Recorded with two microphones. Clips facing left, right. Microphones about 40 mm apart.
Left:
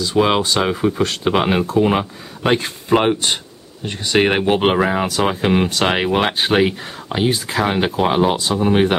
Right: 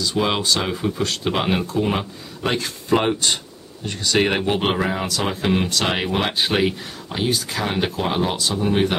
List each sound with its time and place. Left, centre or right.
0.0 s speech: centre